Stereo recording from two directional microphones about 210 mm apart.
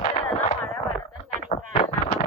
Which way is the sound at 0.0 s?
30° left (ahead or behind).